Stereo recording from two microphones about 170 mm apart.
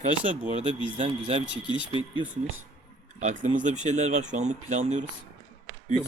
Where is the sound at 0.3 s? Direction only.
40° right (ahead or behind).